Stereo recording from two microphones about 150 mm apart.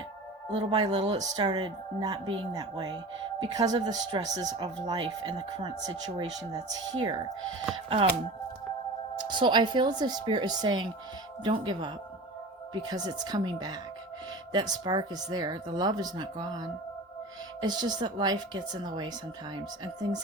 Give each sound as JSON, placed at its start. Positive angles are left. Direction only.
{"t": 0.5, "sound": "speech", "side_deg": -35}
{"t": 9.1, "sound": "speech", "side_deg": -30}